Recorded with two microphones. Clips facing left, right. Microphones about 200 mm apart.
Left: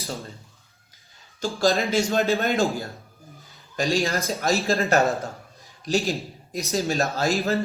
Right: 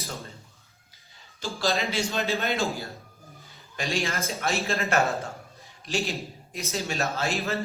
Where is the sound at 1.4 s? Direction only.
45° left (ahead or behind).